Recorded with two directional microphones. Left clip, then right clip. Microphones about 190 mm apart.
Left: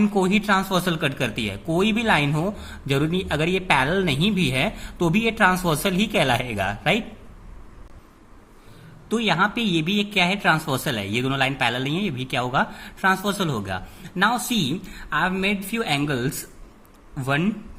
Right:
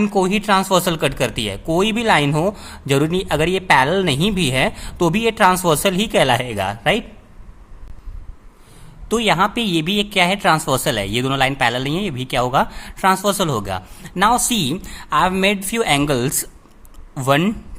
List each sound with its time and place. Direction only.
0.0 s speech: 20° right (ahead or behind)
9.0 s a man's voice: 30° right (ahead or behind)